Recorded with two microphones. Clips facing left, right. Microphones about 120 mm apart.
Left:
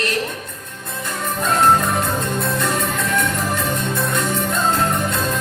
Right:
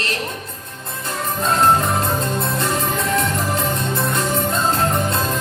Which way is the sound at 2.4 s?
25° right (ahead or behind).